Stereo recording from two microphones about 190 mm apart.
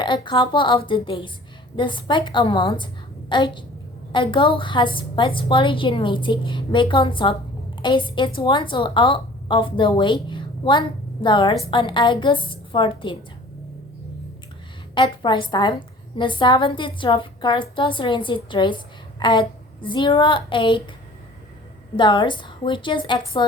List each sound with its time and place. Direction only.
0.0 s a woman's voice: 25° left (ahead or behind)
14.9 s a woman's voice: 25° left (ahead or behind)
21.9 s a woman's voice: 25° left (ahead or behind)